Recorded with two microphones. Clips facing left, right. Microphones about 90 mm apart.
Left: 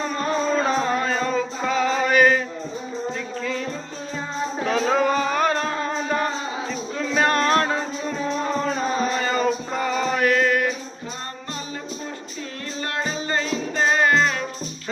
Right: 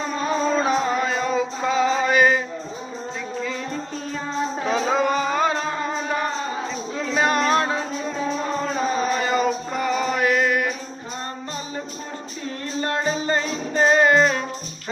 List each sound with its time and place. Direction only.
0.0 s music: 10° right (ahead or behind)
4.6 s music: 15° right (ahead or behind)
8.8 s music: 5° right (ahead or behind)
12.8 s music: 30° right (ahead or behind)